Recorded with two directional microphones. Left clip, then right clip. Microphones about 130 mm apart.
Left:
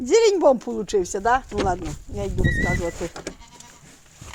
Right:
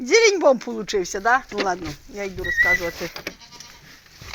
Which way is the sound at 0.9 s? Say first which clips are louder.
Right 1 dB; 40° left (ahead or behind).